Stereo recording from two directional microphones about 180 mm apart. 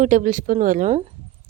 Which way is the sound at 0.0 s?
45° right (ahead or behind).